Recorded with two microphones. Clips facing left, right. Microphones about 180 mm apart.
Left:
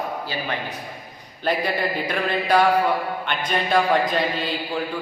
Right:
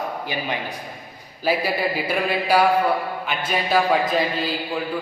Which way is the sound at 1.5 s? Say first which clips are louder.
Right 1 dB; 5° right (ahead or behind).